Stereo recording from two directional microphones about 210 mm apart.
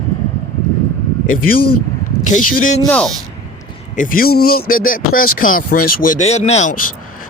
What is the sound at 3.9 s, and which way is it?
Speech, 40° left (ahead or behind).